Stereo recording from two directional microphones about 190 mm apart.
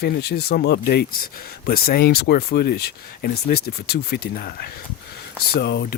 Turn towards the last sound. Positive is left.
turn(degrees=60)  # may be behind; listen again after turning